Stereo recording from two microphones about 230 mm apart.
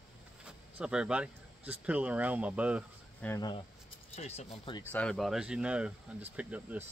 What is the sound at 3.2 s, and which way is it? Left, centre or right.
Speech, centre.